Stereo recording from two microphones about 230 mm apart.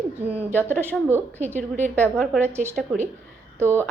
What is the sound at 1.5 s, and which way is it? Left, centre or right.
Speech, right.